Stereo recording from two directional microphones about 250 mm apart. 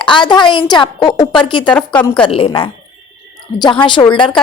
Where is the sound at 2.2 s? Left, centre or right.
Left.